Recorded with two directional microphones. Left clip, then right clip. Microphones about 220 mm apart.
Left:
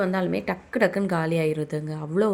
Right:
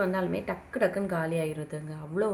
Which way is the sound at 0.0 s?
35° left (ahead or behind).